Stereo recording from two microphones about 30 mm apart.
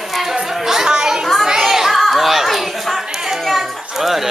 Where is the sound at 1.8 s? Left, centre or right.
Centre.